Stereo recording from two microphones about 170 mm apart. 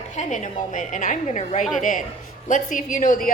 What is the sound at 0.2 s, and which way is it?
A woman's voice, 45° left (ahead or behind).